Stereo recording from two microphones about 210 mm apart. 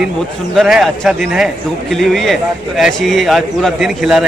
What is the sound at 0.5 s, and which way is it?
A man's voice, centre (ahead or behind).